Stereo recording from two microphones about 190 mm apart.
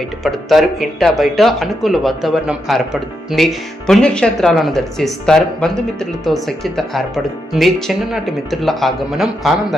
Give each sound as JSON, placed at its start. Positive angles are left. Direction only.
{"t": 0.3, "sound": "speech", "side_deg": 0}